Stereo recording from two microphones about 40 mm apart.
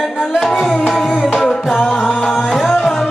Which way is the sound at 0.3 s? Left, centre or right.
Centre.